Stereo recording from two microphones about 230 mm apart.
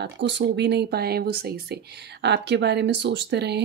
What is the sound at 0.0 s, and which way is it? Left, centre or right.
Speech, right.